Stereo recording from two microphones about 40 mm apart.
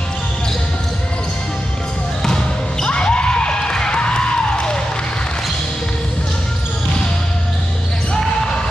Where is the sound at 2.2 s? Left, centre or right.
Centre.